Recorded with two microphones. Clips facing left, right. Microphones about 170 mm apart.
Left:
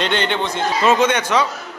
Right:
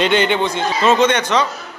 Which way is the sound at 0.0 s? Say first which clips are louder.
Right 4 dB; 5° right (ahead or behind).